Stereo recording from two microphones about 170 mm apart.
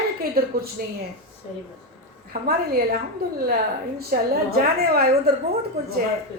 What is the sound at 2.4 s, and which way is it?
Speech, 65° right (ahead or behind).